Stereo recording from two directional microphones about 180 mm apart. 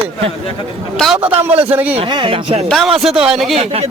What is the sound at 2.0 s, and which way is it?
Speech, 25° right (ahead or behind).